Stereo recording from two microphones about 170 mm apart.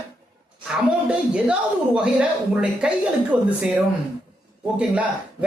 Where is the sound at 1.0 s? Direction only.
5° right (ahead or behind).